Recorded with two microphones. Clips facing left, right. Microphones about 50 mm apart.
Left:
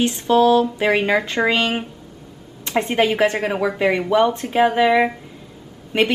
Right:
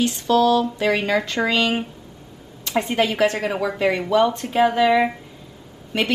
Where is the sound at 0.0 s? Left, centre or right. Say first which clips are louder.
Left 2 dB; left.